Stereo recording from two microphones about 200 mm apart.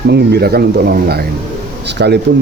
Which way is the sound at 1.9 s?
55° right (ahead or behind).